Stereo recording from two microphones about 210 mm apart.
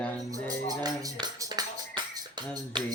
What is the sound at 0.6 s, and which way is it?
Speech, 15° right (ahead or behind).